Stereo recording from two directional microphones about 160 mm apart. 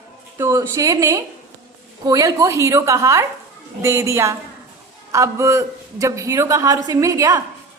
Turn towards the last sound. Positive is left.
turn(degrees=-20)  # may be behind; listen again after turning